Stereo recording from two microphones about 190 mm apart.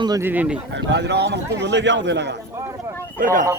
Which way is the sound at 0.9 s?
65° right (ahead or behind).